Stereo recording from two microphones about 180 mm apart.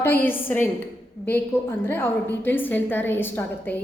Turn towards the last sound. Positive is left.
turn(degrees=10)  # may be behind; listen again after turning